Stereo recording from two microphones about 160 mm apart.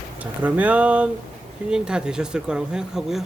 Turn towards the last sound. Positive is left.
turn(degrees=0)  # may be behind; listen again after turning